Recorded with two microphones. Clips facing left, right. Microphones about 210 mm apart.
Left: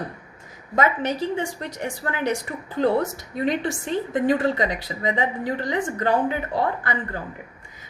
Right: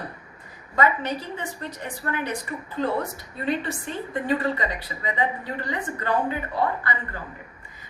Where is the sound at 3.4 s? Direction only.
90° left.